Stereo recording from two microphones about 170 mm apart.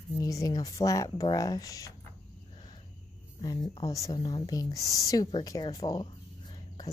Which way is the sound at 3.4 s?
25° left (ahead or behind).